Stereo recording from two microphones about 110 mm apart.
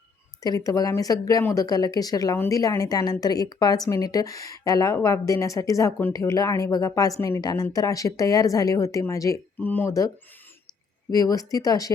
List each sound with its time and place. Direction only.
0.4 s a woman's voice: 35° left (ahead or behind)
9.6 s speech: 15° left (ahead or behind)
11.1 s a woman's voice: 35° left (ahead or behind)